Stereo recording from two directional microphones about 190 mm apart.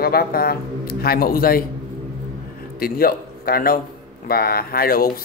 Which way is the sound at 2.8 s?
50° left (ahead or behind).